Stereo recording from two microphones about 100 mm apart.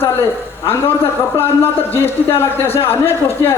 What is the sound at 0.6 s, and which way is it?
A man's voice, 25° left (ahead or behind).